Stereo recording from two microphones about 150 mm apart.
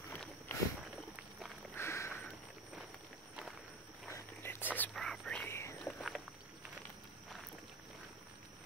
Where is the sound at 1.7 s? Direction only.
20° left (ahead or behind).